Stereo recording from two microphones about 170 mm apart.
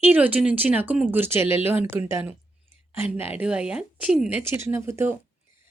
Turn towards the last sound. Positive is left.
turn(degrees=-15)  # may be behind; listen again after turning